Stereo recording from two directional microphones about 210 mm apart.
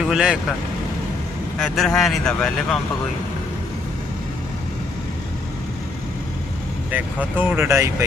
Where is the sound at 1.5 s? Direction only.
Centre (ahead or behind).